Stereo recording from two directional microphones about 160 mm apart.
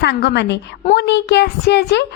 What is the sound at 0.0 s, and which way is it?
A woman's voice, 90° left.